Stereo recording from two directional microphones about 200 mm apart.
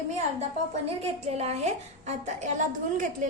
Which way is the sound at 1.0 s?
30° right (ahead or behind).